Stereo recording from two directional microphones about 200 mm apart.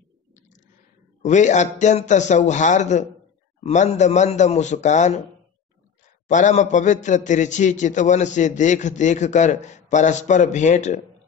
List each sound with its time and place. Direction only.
1.2 s a man's voice: 35° left (ahead or behind)
6.2 s a man's voice: 35° left (ahead or behind)